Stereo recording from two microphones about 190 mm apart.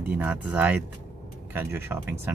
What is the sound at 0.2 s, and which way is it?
Speech, 10° right (ahead or behind).